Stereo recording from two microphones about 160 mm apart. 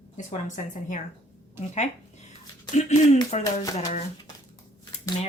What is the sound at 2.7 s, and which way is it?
Speech, 45° left (ahead or behind).